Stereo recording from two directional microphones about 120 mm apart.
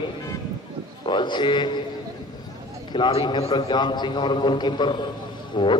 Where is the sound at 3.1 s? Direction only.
45° left (ahead or behind).